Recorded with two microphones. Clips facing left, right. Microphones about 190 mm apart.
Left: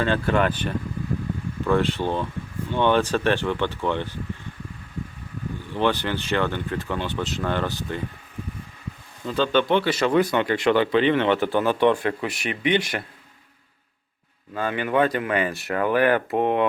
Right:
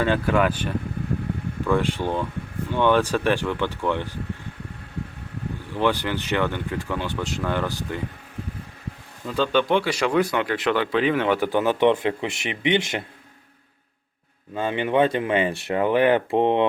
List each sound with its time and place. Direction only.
0.0 s a man's voice: 10° right (ahead or behind)
1.7 s a man's voice: 10° right (ahead or behind)
5.8 s a man's voice: 10° right (ahead or behind)
9.2 s a man's voice: 5° right (ahead or behind); by 13.1 s 20° right (ahead or behind)
14.5 s speech: 25° right (ahead or behind)